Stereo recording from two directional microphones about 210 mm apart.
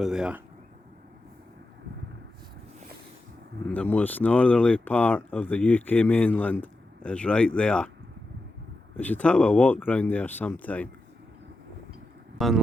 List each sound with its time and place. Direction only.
0.0 s speech: 5° right (ahead or behind)
3.7 s speech: 5° left (ahead or behind)
9.0 s speech: 5° left (ahead or behind)
12.4 s speech: centre (ahead or behind)